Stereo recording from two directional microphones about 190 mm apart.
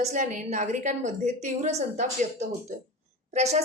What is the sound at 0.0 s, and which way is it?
A woman's voice, 40° right (ahead or behind).